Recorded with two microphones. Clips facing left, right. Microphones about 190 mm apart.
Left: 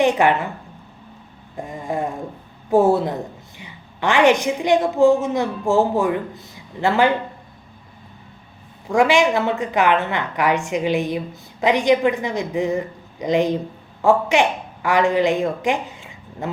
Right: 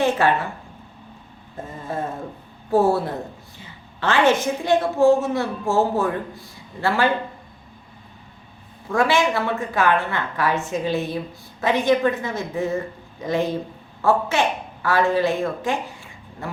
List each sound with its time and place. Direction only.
0.0 s a woman's voice: 15° left (ahead or behind)
1.5 s vehicle: 15° left (ahead or behind)
2.6 s a woman's voice: 15° left (ahead or behind)
8.9 s a woman's voice: 15° left (ahead or behind)